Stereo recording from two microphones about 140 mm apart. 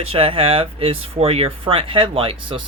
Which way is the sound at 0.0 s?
40° right (ahead or behind).